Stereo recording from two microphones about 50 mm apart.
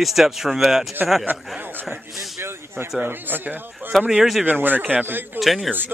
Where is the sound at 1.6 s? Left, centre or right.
Right.